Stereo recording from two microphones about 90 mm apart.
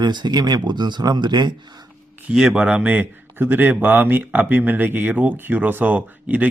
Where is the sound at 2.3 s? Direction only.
10° right (ahead or behind).